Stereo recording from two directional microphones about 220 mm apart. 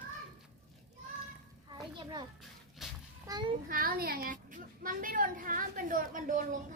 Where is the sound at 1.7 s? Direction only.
20° right (ahead or behind).